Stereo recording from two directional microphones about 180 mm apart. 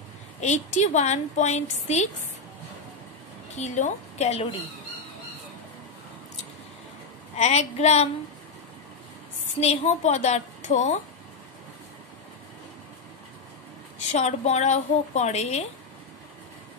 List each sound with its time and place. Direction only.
0.4 s a woman's voice: 40° left (ahead or behind)
3.5 s a woman's voice: 40° left (ahead or behind)
7.3 s a woman's voice: 35° left (ahead or behind)
9.6 s a woman's voice: 35° left (ahead or behind)
14.1 s a woman's voice: 40° left (ahead or behind)